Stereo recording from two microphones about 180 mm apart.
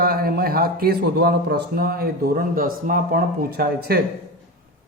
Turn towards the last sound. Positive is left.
turn(degrees=-60)  # may be behind; listen again after turning